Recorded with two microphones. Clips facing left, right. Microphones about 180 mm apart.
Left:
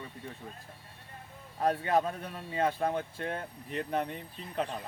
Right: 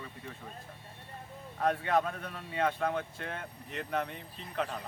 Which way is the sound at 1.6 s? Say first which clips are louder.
Left 1 dB; 35° left (ahead or behind).